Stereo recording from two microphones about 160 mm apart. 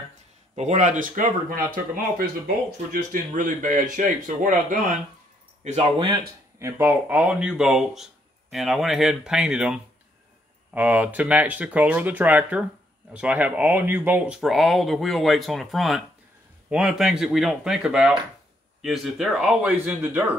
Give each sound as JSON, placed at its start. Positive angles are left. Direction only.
{"t": 0.6, "sound": "speech", "side_deg": -50}
{"t": 2.9, "sound": "speech", "side_deg": -55}
{"t": 5.6, "sound": "speech", "side_deg": -45}
{"t": 6.6, "sound": "speech", "side_deg": -10}